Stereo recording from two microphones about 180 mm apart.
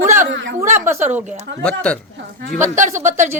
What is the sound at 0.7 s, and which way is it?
Speech, 10° right (ahead or behind).